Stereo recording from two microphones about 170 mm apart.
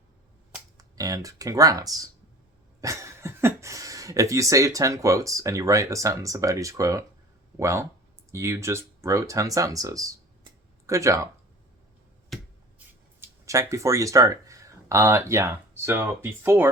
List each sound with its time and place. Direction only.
0.8 s speech: 20° right (ahead or behind)
13.2 s speech: 20° right (ahead or behind)